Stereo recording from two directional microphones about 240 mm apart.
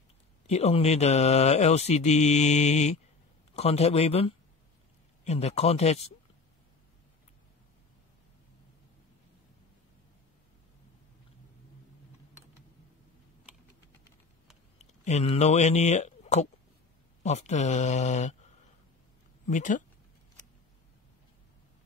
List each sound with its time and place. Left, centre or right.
0.5 s speech: left
14.8 s speech: left
19.4 s speech: left